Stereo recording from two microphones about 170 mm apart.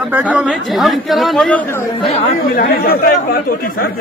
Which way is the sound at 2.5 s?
60° left (ahead or behind).